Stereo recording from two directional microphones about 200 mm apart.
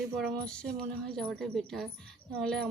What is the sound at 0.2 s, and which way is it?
A woman's voice, 5° left (ahead or behind).